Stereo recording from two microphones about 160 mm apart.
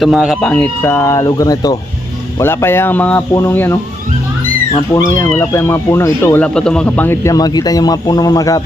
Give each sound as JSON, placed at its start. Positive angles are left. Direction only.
{"t": 0.0, "sound": "speech", "side_deg": 0}
{"t": 0.5, "sound": "speech", "side_deg": 10}
{"t": 4.9, "sound": "speech", "side_deg": 15}